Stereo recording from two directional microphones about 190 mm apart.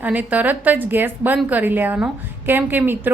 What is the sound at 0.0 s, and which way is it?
A woman's voice, 10° right (ahead or behind).